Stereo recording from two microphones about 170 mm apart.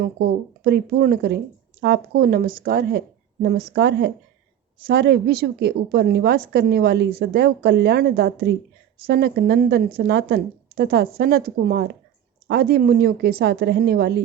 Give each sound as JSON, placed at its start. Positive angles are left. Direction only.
{"t": 0.6, "sound": "a woman's voice", "side_deg": -65}
{"t": 4.8, "sound": "a woman's voice", "side_deg": -70}